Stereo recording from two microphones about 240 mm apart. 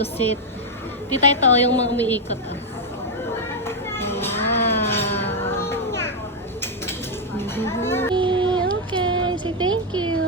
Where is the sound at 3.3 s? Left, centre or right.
Centre.